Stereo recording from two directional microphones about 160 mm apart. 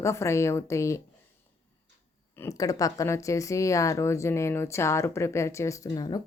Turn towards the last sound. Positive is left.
turn(degrees=25)  # may be behind; listen again after turning